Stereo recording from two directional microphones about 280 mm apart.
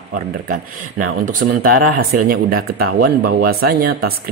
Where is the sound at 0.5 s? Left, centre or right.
Right.